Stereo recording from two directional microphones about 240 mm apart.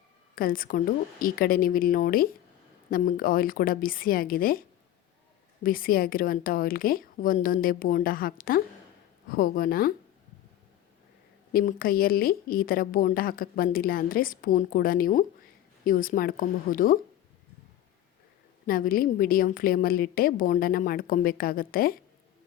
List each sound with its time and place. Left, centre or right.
0.3 s a woman's voice: left
5.6 s a woman's voice: left
11.5 s a woman's voice: left
18.6 s a woman's voice: left